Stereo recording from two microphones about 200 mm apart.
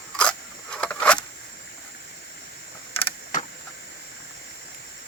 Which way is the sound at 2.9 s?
30° left (ahead or behind).